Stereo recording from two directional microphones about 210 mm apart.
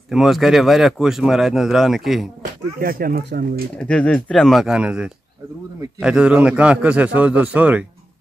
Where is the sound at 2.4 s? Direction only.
45° right (ahead or behind).